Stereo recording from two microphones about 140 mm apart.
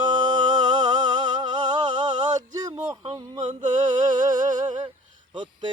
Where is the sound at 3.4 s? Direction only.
60° right (ahead or behind).